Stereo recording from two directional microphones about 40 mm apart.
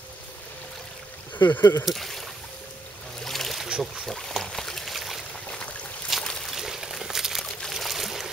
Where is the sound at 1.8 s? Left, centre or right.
Centre.